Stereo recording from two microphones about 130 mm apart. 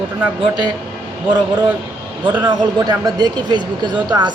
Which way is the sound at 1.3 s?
35° right (ahead or behind).